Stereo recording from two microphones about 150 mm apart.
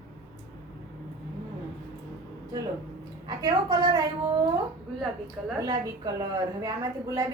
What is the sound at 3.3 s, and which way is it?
Speech, 25° right (ahead or behind).